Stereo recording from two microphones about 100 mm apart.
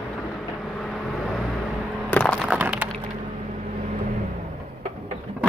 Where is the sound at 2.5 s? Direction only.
15° right (ahead or behind).